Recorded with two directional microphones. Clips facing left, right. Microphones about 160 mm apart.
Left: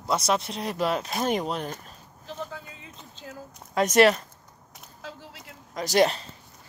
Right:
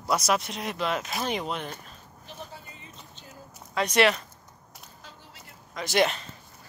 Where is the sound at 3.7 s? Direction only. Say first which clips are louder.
Left 4 dB; 45° left (ahead or behind).